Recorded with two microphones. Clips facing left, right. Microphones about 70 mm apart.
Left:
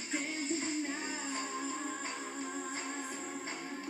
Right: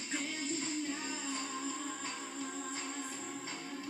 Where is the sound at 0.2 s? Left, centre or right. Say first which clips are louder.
Left 2 dB; left.